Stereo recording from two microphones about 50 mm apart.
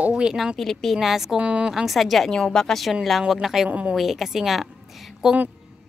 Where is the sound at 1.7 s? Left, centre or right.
Centre.